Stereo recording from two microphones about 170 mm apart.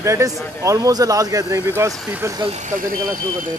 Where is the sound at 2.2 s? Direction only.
20° right (ahead or behind).